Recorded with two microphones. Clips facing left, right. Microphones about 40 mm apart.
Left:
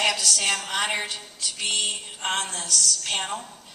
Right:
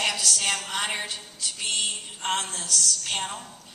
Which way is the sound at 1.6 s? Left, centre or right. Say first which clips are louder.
Left 2 dB; left.